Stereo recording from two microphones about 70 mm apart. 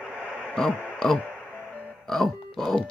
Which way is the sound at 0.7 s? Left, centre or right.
Left.